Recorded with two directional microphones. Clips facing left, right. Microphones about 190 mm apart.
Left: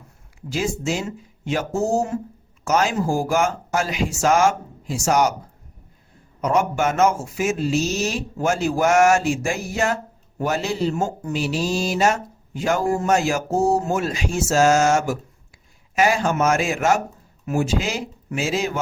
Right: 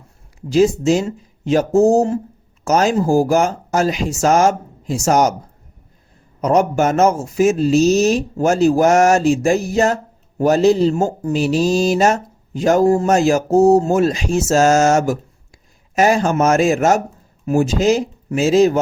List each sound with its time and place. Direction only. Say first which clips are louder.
0.5 s speech: right 10 dB; 40° right (ahead or behind)
6.4 s speech: right 5 dB; 40° right (ahead or behind)